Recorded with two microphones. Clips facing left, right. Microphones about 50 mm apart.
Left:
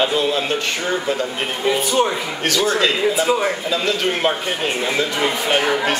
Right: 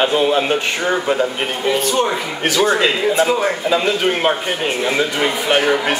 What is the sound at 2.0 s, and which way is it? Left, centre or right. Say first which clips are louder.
A man's voice: right 2 dB; centre.